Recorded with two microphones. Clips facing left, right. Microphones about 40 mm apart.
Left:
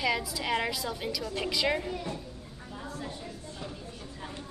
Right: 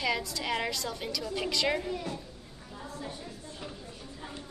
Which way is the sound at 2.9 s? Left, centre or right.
Left.